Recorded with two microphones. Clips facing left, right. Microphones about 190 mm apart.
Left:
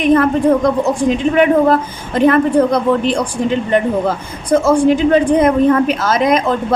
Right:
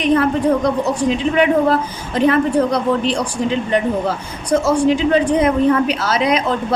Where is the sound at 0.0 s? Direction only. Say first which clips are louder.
Left 3 dB; 50° left (ahead or behind).